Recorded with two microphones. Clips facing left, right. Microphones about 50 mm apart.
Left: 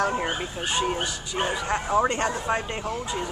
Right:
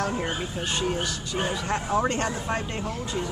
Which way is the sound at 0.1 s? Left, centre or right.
Left.